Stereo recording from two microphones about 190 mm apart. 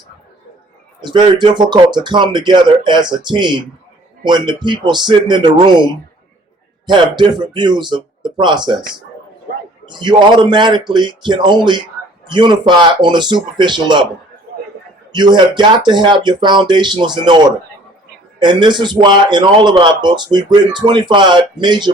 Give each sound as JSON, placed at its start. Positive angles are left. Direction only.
{"t": 1.0, "sound": "a man's voice", "side_deg": -25}
{"t": 9.8, "sound": "a man's voice", "side_deg": -25}
{"t": 15.1, "sound": "a man's voice", "side_deg": -25}